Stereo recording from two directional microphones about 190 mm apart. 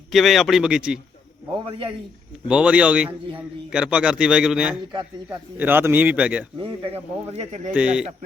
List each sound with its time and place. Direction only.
0.1 s a man's voice: centre (ahead or behind)
2.5 s a man's voice: 5° right (ahead or behind)
6.6 s speech: 30° right (ahead or behind)
7.7 s speech: 5° right (ahead or behind)